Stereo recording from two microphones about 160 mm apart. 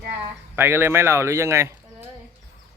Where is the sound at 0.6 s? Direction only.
15° right (ahead or behind).